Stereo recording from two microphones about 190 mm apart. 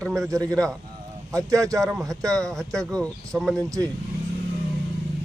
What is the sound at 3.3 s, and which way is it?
Speech, 5° left (ahead or behind).